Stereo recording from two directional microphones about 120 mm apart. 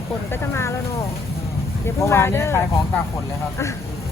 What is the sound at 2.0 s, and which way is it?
Speech, 20° left (ahead or behind).